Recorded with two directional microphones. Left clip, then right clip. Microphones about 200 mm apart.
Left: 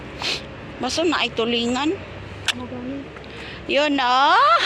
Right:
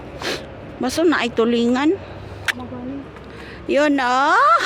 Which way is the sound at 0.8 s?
55° right (ahead or behind).